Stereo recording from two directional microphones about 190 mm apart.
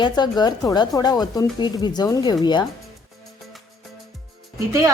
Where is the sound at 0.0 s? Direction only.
20° left (ahead or behind).